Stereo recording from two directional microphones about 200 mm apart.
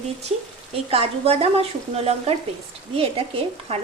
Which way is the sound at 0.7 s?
30° right (ahead or behind).